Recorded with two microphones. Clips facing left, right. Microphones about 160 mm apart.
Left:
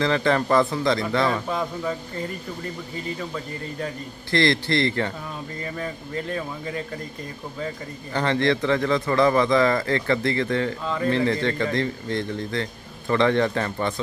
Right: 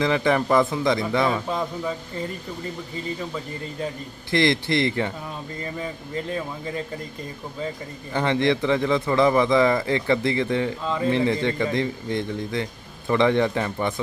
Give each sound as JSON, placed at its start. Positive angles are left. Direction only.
{"t": 0.0, "sound": "a man's voice", "side_deg": -15}
{"t": 1.3, "sound": "speech", "side_deg": -5}
{"t": 4.3, "sound": "speech", "side_deg": -20}
{"t": 8.1, "sound": "a man's voice", "side_deg": -15}